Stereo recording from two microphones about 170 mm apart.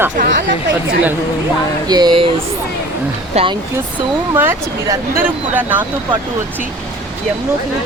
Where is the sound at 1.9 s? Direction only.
25° right (ahead or behind).